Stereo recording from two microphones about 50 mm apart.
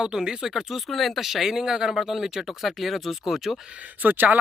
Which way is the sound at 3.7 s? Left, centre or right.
Right.